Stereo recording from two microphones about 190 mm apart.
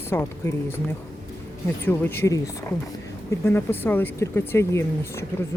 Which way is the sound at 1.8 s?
10° left (ahead or behind).